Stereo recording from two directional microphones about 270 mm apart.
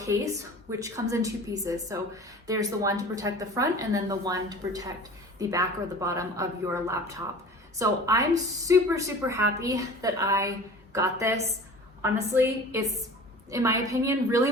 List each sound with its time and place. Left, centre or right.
0.0 s a woman's voice: centre